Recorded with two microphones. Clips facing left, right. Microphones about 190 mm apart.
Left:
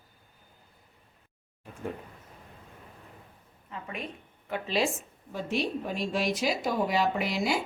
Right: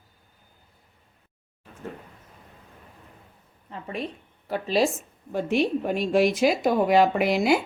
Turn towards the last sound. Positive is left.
turn(degrees=-60)  # may be behind; listen again after turning